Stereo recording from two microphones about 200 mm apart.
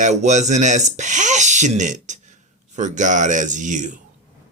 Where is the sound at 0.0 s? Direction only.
35° right (ahead or behind).